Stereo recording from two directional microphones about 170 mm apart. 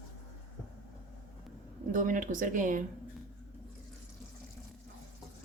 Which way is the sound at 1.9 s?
50° right (ahead or behind).